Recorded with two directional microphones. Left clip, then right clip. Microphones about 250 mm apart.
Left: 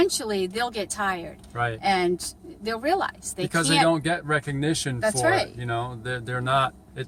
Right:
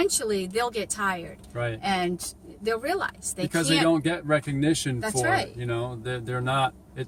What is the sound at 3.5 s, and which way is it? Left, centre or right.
A man's voice, centre.